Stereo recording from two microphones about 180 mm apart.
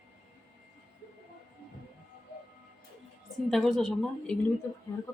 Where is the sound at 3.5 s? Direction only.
Centre (ahead or behind).